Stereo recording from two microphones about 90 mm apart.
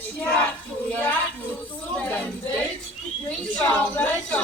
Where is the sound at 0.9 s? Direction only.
20° left (ahead or behind).